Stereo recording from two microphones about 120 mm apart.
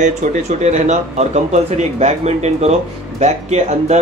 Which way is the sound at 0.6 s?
75° right (ahead or behind).